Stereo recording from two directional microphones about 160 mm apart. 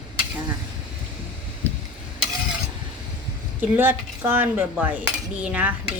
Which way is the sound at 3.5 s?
15° right (ahead or behind).